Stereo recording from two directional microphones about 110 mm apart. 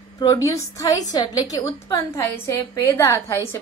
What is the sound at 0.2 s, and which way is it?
A woman's voice, 35° left (ahead or behind).